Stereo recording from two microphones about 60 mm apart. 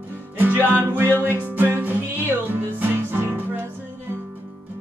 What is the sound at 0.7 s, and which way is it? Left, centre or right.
Music, right.